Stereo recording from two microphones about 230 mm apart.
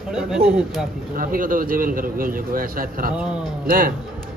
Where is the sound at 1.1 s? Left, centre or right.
Right.